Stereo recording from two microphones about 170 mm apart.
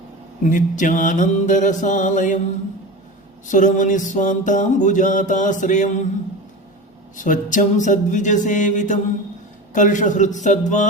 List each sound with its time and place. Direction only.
0.4 s mantra: 50° left (ahead or behind)
3.4 s mantra: 50° left (ahead or behind)
7.2 s mantra: 50° left (ahead or behind)